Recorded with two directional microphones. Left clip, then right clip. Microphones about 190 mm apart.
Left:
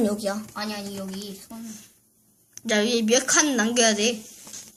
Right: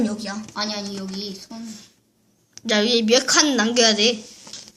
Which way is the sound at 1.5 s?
5° left (ahead or behind).